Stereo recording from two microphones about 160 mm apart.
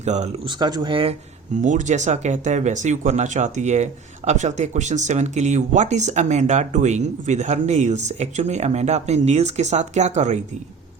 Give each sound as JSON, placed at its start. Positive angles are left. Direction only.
{"t": 0.0, "sound": "speech", "side_deg": -45}
{"t": 0.4, "sound": "speech", "side_deg": -25}
{"t": 1.6, "sound": "speech", "side_deg": -50}